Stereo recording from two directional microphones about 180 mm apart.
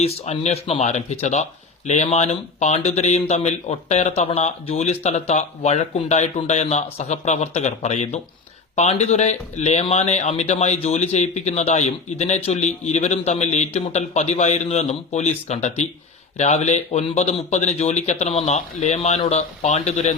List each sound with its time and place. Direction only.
0.0 s a man's voice: 35° left (ahead or behind)